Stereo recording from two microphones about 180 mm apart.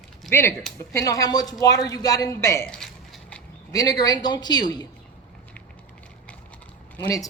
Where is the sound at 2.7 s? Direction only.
5° left (ahead or behind).